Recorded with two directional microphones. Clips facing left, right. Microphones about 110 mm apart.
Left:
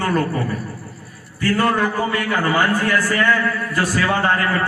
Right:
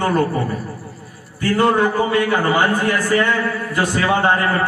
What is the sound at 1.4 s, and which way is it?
A man's voice, 20° right (ahead or behind).